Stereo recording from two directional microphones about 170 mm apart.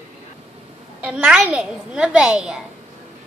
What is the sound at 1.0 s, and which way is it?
A child's voice, 5° right (ahead or behind).